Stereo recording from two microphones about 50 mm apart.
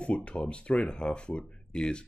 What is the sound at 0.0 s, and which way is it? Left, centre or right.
Speech, left.